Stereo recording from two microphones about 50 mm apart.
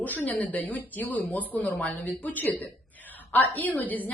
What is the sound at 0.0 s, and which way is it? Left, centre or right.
A woman's voice, left.